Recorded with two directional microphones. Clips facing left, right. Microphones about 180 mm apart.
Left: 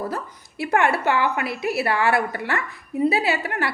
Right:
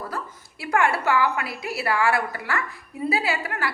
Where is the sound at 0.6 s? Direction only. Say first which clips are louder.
Left 2 dB; 20° left (ahead or behind).